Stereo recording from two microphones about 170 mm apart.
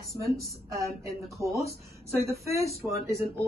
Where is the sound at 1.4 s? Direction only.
20° right (ahead or behind).